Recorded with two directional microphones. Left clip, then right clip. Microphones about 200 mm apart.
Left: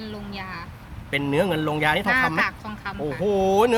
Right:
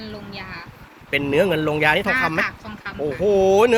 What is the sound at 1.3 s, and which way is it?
Speech, 10° right (ahead or behind).